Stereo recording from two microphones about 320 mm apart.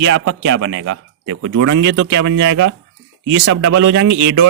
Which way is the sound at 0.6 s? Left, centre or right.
Right.